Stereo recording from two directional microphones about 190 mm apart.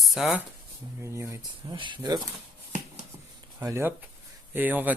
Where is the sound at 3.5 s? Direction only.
15° right (ahead or behind).